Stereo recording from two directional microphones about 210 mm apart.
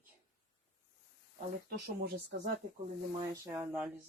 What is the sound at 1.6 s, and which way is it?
Speech, 50° right (ahead or behind).